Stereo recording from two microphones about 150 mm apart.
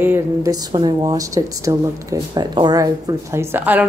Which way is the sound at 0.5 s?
25° right (ahead or behind).